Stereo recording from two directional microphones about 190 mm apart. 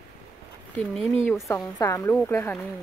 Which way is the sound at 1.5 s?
20° left (ahead or behind).